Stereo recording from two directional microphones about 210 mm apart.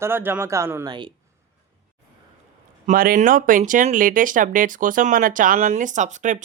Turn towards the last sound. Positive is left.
turn(degrees=-35)  # may be behind; listen again after turning